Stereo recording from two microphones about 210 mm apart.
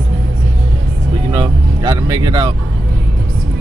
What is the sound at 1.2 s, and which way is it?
Speech, 20° right (ahead or behind).